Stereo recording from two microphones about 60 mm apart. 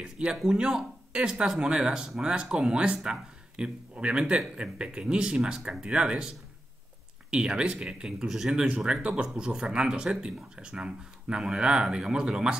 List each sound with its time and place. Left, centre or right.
0.0 s speech: centre
8.6 s speech: right